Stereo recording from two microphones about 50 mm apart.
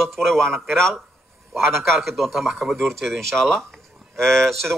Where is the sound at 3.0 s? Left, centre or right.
Centre.